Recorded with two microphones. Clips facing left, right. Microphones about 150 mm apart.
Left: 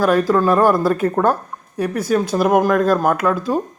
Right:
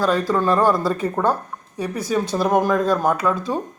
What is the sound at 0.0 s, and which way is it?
Speech, 10° left (ahead or behind).